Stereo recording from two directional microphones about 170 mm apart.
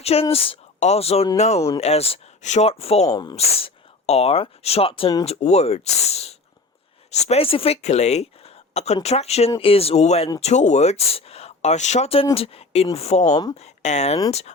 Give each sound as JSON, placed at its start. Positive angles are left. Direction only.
{"t": 0.0, "sound": "speech", "side_deg": 35}
{"t": 3.1, "sound": "speech", "side_deg": 25}
{"t": 3.3, "sound": "speech", "side_deg": 40}
{"t": 13.2, "sound": "speech", "side_deg": 25}
{"t": 13.6, "sound": "speech", "side_deg": 40}